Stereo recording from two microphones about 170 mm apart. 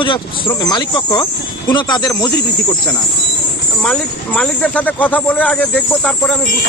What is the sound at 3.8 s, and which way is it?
Speech, 5° left (ahead or behind).